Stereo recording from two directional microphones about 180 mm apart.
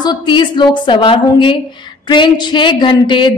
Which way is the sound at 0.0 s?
25° left (ahead or behind).